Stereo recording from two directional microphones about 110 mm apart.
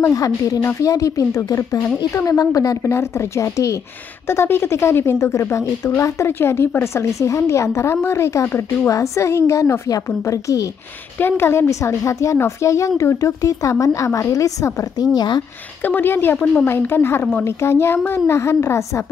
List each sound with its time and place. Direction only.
0.1 s a woman's voice: 30° left (ahead or behind)
11.1 s a woman's voice: 20° left (ahead or behind); by 15.4 s 40° left (ahead or behind)
15.8 s a woman's voice: 20° left (ahead or behind)